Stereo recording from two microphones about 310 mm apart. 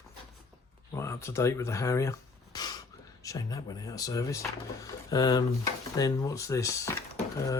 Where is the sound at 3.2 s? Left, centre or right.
Centre.